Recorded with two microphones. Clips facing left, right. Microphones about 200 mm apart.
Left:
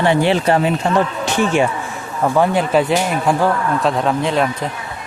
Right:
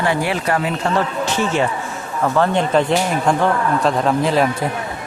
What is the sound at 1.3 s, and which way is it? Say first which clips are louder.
Speech: left 4 dB; 15° left (ahead or behind).